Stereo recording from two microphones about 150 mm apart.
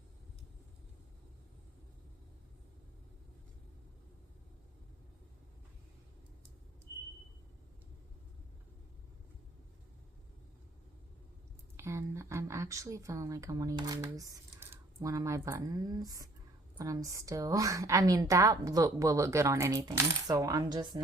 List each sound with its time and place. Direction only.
11.8 s a woman's voice: 20° right (ahead or behind)